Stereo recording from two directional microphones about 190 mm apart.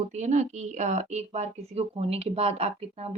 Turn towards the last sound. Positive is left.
turn(degrees=-35)  # may be behind; listen again after turning